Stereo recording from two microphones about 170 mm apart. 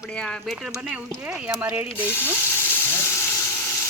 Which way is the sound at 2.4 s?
15° left (ahead or behind).